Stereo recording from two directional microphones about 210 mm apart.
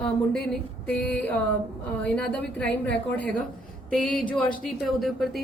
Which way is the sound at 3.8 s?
5° left (ahead or behind).